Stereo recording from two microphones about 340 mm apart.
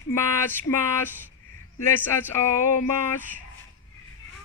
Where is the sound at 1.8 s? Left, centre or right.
Centre.